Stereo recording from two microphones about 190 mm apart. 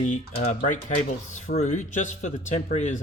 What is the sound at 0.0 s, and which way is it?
Speech, 40° left (ahead or behind).